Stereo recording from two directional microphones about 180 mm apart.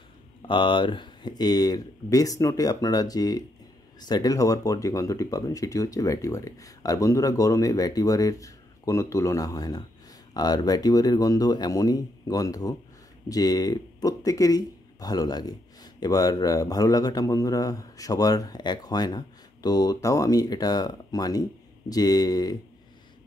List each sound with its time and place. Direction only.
0.5 s speech: 25° left (ahead or behind)